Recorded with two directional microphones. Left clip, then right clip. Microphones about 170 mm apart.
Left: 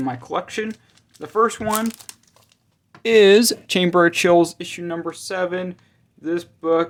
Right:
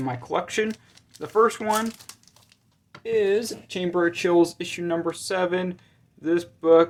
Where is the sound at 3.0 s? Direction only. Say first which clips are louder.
Left 10 dB; 90° left; by 4.3 s 55° left (ahead or behind).